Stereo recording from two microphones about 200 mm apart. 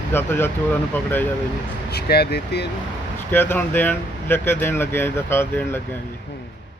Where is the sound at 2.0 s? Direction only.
55° left (ahead or behind).